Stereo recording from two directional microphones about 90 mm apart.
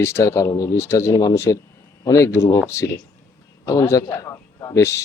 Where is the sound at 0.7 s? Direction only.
30° left (ahead or behind).